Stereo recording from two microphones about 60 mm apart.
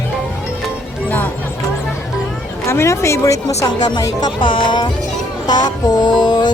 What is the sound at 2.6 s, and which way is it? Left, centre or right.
Speech, left.